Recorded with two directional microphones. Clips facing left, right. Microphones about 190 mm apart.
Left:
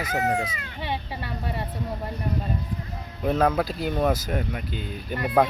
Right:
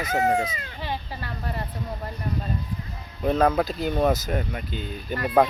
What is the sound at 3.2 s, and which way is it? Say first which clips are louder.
Speech: right 1 dB; 5° left (ahead or behind).